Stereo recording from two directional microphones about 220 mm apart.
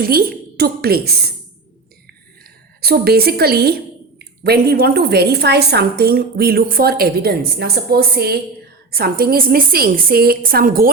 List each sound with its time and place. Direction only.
0.0 s a woman's voice: 45° right (ahead or behind)
2.8 s a woman's voice: 45° right (ahead or behind)